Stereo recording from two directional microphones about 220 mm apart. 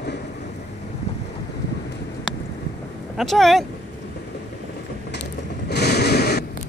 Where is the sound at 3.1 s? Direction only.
Centre (ahead or behind).